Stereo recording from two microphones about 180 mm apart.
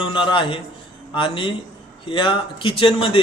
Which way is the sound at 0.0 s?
30° left (ahead or behind).